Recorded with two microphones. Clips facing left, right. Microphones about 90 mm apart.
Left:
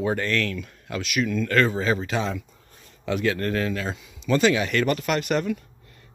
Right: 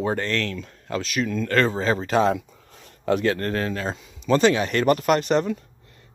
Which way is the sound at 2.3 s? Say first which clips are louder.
Right 7 dB; 70° right (ahead or behind).